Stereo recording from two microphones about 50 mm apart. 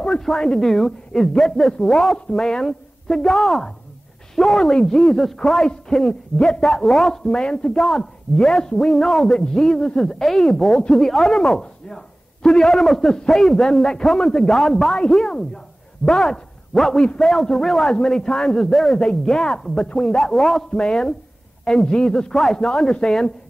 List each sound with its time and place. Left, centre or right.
0.0 s a sound: centre
0.3 s a woman's voice: centre
7.2 s a woman's voice: centre
7.7 s a man's voice: centre
16.9 s a woman's voice: centre
17.2 s a man's voice: centre